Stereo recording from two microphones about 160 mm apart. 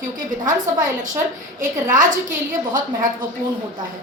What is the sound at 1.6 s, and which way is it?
Speech, 55° right (ahead or behind).